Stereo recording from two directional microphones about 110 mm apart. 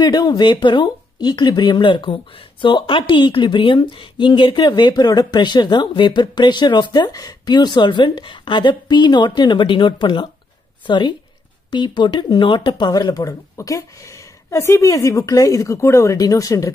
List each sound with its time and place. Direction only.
0.0 s speech: 40° left (ahead or behind)